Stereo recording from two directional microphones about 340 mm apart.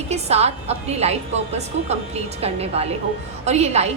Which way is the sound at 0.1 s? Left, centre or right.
Centre.